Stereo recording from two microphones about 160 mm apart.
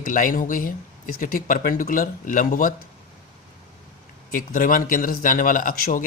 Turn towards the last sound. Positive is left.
turn(degrees=65)  # may be behind; listen again after turning